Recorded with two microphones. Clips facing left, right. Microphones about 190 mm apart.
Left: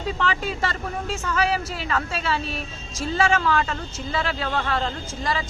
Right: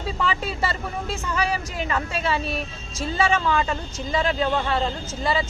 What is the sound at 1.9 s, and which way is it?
A man's voice, 10° right (ahead or behind).